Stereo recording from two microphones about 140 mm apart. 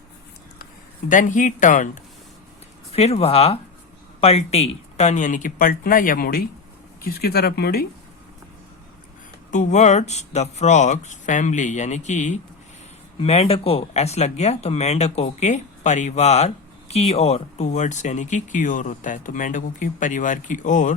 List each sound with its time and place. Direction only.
1.0 s speech: 65° left (ahead or behind)
2.9 s speech: 50° left (ahead or behind); by 7.9 s 90° left
9.5 s speech: 60° left (ahead or behind)
13.1 s speech: 45° left (ahead or behind); by 20.9 s 65° left (ahead or behind)